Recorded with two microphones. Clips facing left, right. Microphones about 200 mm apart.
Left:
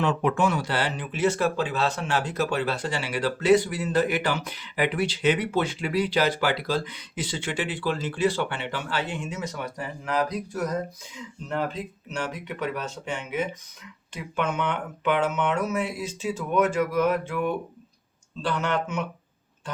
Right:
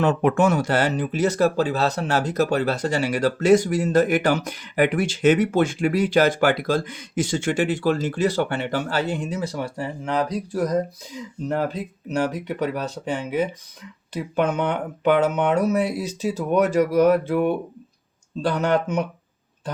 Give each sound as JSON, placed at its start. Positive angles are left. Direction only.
{"t": 0.0, "sound": "speech", "side_deg": -50}